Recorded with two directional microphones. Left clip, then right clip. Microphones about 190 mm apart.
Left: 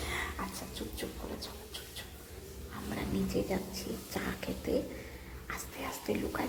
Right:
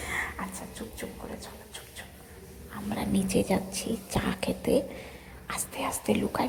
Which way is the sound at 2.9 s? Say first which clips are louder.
Right 6 dB; 30° right (ahead or behind).